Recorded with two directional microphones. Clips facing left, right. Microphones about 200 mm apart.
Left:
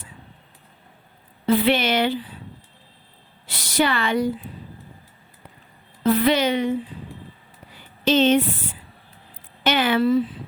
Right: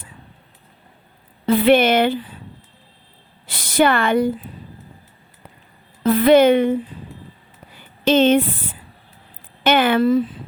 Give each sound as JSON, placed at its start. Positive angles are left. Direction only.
{"t": 1.5, "sound": "a woman's voice", "side_deg": -50}
{"t": 3.4, "sound": "a sound", "side_deg": -50}
{"t": 6.0, "sound": "a woman's voice", "side_deg": -50}
{"t": 8.0, "sound": "a woman's voice", "side_deg": -55}
{"t": 9.6, "sound": "a woman's voice", "side_deg": -55}